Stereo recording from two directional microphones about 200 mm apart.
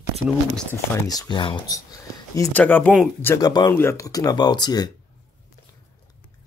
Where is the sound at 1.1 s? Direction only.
20° left (ahead or behind).